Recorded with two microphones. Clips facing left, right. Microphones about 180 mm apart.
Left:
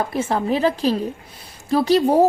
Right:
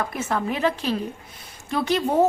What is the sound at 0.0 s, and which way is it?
A woman's voice, 30° left (ahead or behind).